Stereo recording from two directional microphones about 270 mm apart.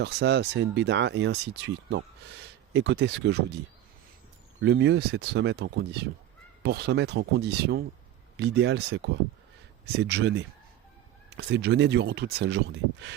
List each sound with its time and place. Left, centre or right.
0.0 s speech: right
4.6 s speech: right